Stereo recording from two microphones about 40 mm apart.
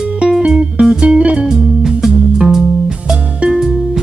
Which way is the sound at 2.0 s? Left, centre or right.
Centre.